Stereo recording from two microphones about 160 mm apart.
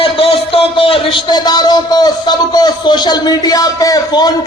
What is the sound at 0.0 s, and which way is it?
A man's voice, 35° left (ahead or behind).